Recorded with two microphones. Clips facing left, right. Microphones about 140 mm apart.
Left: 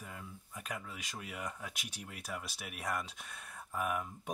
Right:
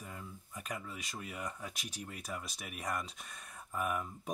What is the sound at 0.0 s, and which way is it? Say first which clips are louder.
Speech: right 1 dB; centre (ahead or behind).